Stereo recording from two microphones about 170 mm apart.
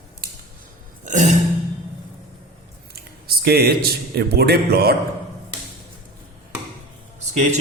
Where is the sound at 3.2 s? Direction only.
65° right (ahead or behind).